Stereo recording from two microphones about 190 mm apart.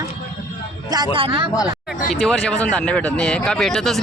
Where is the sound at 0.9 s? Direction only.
25° right (ahead or behind).